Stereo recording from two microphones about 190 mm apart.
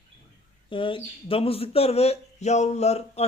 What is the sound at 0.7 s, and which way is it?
Speech, 25° left (ahead or behind).